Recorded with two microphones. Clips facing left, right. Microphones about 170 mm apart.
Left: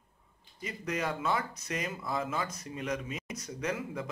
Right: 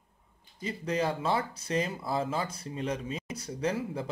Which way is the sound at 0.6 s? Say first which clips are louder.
Right 4 dB; 30° right (ahead or behind).